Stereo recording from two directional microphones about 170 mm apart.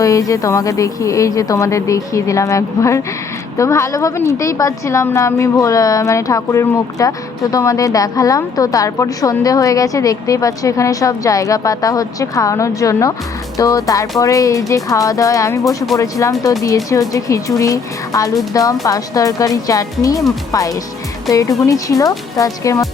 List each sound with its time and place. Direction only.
0.0 s a woman's voice: 20° left (ahead or behind)